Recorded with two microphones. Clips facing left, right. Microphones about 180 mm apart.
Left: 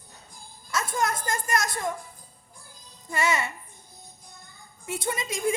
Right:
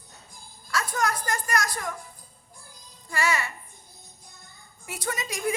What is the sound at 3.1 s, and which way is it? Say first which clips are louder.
Speech: left 1 dB; 20° left (ahead or behind).